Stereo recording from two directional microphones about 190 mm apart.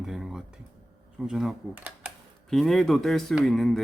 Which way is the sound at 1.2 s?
Centre (ahead or behind).